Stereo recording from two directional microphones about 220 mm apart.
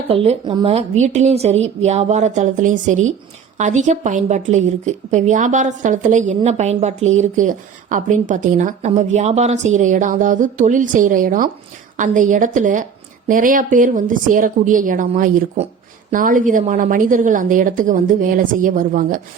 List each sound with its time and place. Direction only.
0.1 s a woman's voice: 25° right (ahead or behind)